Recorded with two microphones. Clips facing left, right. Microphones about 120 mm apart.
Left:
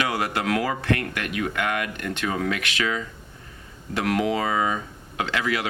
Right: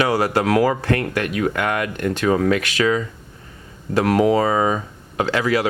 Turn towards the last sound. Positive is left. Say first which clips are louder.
# right 7 dB
turn(degrees=-40)  # may be behind; listen again after turning